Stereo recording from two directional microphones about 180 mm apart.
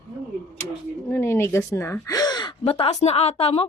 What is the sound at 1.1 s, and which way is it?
Speech, 15° left (ahead or behind).